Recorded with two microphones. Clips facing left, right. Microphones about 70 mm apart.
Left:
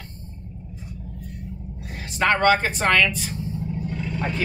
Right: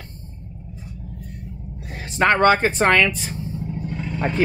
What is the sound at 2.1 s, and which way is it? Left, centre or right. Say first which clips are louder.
Speech: right 3 dB; right.